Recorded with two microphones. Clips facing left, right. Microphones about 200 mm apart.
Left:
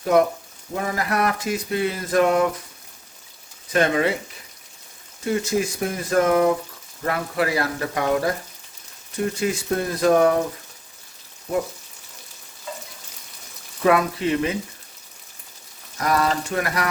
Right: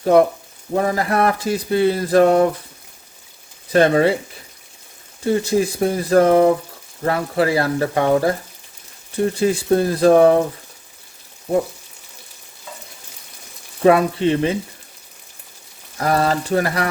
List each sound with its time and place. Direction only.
0.0 s speech: 35° right (ahead or behind)
3.7 s speech: 35° right (ahead or behind)
5.2 s speech: 30° right (ahead or behind)
13.8 s speech: 30° right (ahead or behind)
16.0 s speech: 30° right (ahead or behind)